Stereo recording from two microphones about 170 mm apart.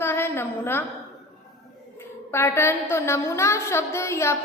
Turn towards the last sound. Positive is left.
turn(degrees=15)  # may be behind; listen again after turning